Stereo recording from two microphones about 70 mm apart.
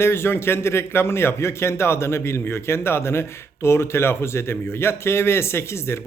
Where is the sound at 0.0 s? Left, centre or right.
Left.